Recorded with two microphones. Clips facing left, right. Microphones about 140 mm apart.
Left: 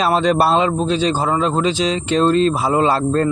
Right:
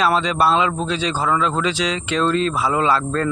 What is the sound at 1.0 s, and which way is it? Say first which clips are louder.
Speech: left 5 dB; 50° left (ahead or behind).